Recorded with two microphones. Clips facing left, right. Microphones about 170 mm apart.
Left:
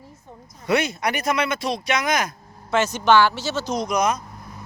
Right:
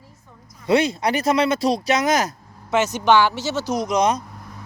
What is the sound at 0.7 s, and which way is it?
Speech, 30° right (ahead or behind).